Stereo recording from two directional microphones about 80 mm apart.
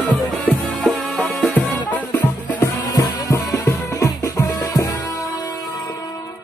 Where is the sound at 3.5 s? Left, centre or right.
Left.